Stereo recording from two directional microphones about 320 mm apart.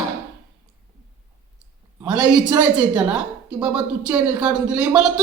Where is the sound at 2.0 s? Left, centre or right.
Centre.